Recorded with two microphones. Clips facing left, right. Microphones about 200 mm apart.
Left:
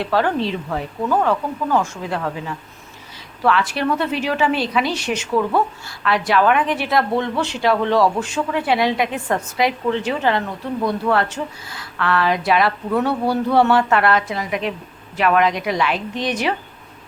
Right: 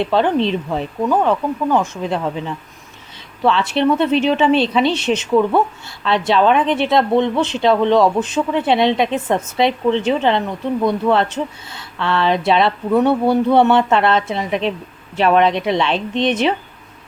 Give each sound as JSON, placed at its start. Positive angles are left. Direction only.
{"t": 0.0, "sound": "speech", "side_deg": -20}
{"t": 3.4, "sound": "speech", "side_deg": -25}